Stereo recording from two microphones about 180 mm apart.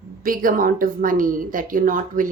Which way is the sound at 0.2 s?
50° right (ahead or behind).